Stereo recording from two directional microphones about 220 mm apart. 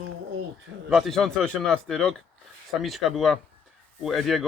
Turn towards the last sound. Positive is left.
turn(degrees=0)  # may be behind; listen again after turning